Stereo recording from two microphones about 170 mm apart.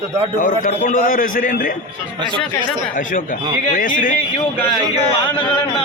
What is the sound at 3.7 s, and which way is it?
Speech, 50° left (ahead or behind).